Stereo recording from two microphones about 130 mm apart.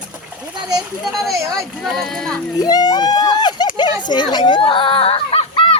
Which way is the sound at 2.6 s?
30° left (ahead or behind).